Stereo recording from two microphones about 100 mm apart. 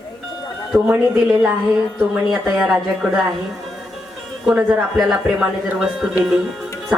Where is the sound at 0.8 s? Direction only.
15° right (ahead or behind).